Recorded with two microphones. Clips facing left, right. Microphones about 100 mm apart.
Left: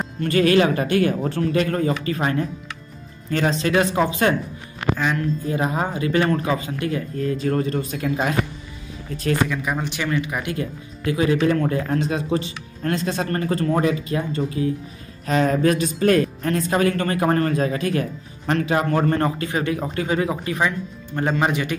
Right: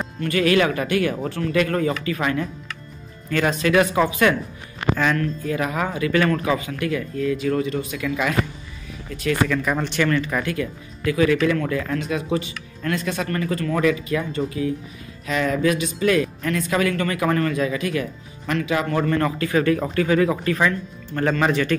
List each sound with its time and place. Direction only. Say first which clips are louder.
0.2 s speech: left 2 dB; 35° left (ahead or behind)
5.0 s speech: right 2 dB; 15° left (ahead or behind)
5.4 s speech: left 1 dB; 30° left (ahead or behind)
9.5 s speech: right 2 dB; 10° left (ahead or behind)
10.5 s a man's voice: right 1 dB; 30° left (ahead or behind)